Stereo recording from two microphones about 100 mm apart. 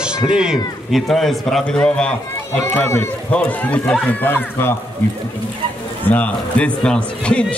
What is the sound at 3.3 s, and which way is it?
A man's voice, 15° left (ahead or behind).